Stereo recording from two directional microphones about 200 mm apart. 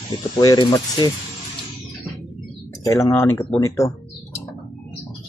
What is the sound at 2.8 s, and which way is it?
Speech, 15° left (ahead or behind).